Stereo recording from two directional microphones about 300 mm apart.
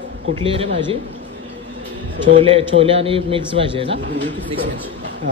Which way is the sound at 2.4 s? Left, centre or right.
Centre.